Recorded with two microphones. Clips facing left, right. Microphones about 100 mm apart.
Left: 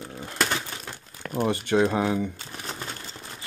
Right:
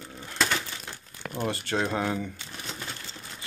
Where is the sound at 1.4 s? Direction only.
15° left (ahead or behind).